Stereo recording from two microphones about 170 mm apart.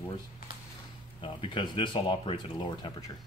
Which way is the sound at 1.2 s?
30° left (ahead or behind).